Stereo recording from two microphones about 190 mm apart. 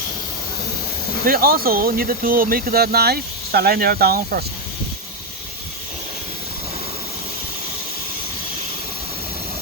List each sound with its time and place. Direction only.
1.3 s speech: 50° right (ahead or behind)